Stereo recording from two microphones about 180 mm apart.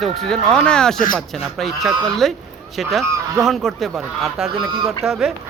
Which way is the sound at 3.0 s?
15° right (ahead or behind).